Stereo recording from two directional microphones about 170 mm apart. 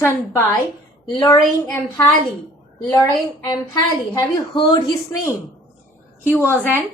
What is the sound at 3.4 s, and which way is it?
A woman's voice, 25° left (ahead or behind).